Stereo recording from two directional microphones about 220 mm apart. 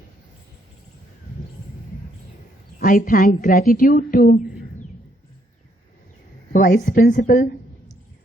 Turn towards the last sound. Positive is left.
turn(degrees=35)  # may be behind; listen again after turning